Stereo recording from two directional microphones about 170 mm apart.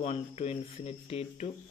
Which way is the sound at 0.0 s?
40° left (ahead or behind).